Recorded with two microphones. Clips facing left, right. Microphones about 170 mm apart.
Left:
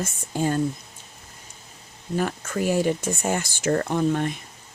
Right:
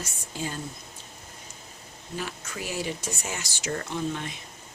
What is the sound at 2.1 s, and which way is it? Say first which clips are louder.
Speech: left 10 dB; 50° left (ahead or behind).